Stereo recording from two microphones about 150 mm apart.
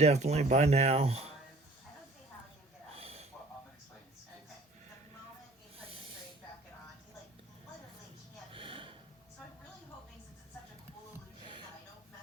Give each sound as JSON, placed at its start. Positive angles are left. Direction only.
{"t": 0.0, "sound": "speech", "side_deg": -50}
{"t": 2.9, "sound": "a sound", "side_deg": -40}
{"t": 8.5, "sound": "gasp", "side_deg": -35}